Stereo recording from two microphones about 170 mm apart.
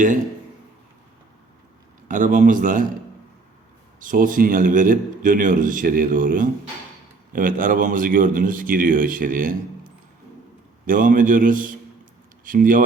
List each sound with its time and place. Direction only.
2.0 s a man's voice: 50° right (ahead or behind)
4.0 s a man's voice: 50° right (ahead or behind)
10.8 s a man's voice: 55° right (ahead or behind)